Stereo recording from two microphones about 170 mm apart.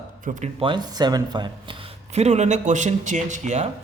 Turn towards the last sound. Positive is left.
turn(degrees=-45)  # may be behind; listen again after turning